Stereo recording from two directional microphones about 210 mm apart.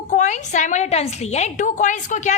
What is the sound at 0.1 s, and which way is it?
A woman's voice, 35° left (ahead or behind).